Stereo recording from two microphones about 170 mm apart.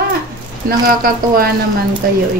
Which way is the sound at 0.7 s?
60° right (ahead or behind).